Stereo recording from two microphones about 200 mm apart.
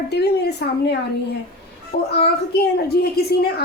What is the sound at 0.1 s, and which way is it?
A woman's voice, 55° left (ahead or behind).